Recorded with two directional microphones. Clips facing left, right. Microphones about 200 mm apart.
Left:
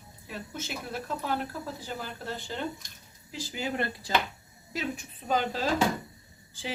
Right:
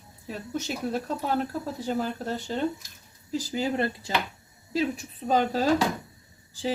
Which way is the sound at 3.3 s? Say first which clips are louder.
Right 6 dB; 35° right (ahead or behind).